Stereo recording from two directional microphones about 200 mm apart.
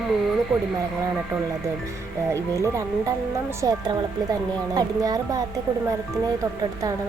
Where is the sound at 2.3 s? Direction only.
15° right (ahead or behind).